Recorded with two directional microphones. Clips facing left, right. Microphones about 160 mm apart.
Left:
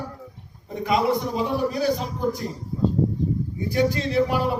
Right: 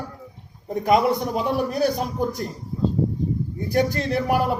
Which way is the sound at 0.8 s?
55° right (ahead or behind).